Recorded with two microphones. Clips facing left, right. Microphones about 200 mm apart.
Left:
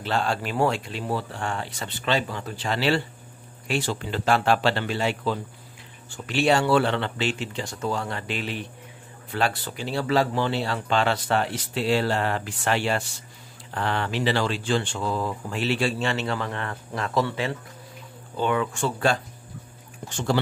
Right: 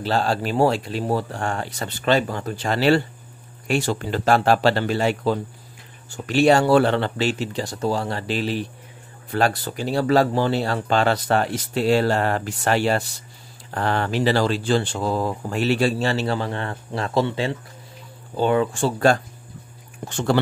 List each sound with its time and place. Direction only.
0.0 s speech: 35° right (ahead or behind)
20.1 s speech: 60° right (ahead or behind)